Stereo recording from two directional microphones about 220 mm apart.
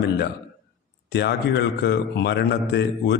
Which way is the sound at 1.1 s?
50° left (ahead or behind).